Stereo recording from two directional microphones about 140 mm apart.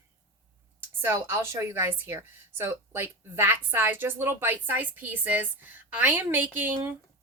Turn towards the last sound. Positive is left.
turn(degrees=-15)  # may be behind; listen again after turning